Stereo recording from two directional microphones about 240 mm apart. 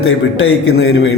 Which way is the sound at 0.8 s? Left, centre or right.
Left.